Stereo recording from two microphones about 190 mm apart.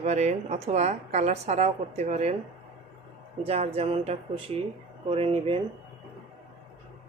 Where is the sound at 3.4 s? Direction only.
30° right (ahead or behind).